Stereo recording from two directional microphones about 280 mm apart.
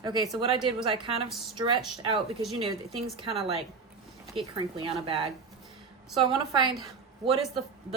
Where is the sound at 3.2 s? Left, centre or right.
Right.